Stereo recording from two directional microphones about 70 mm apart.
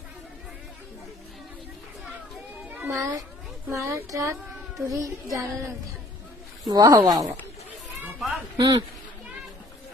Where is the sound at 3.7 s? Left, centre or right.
Right.